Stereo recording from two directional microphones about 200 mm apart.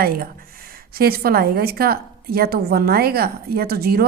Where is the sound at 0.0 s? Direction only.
45° right (ahead or behind).